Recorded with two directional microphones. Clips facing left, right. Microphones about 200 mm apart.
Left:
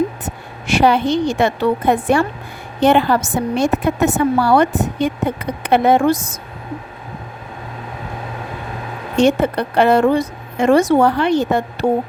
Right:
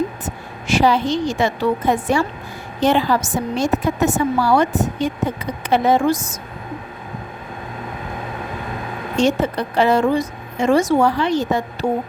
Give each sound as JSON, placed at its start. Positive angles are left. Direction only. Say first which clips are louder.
{"t": 0.7, "sound": "a woman's voice", "louder": "left 2 dB", "side_deg": 60}
{"t": 9.1, "sound": "a woman's voice", "louder": "left 3 dB", "side_deg": 60}